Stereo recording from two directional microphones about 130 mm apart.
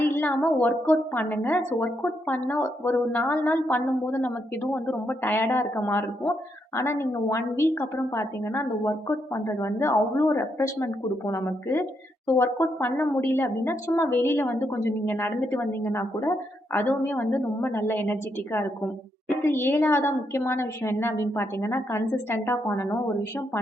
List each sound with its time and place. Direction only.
0.0 s a woman's voice: 15° left (ahead or behind)